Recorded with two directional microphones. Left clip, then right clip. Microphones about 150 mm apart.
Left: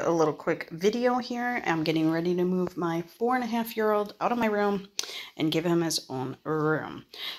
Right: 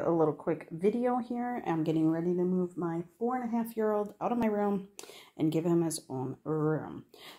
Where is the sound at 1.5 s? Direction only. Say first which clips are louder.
Left 5 dB; 10° right (ahead or behind).